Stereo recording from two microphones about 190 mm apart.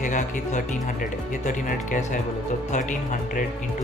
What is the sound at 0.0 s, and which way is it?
Speech, 40° left (ahead or behind).